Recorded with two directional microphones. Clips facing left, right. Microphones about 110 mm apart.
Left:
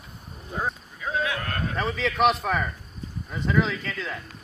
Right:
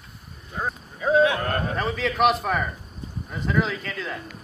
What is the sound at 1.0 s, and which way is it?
Speech, 30° right (ahead or behind).